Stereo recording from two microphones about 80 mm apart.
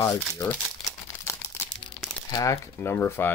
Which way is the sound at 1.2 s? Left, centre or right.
Left.